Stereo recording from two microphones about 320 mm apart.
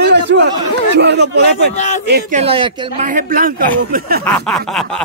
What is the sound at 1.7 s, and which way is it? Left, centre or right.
Speech, left.